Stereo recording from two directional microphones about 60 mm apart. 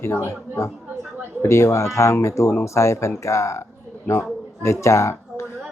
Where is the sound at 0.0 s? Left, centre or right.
Left.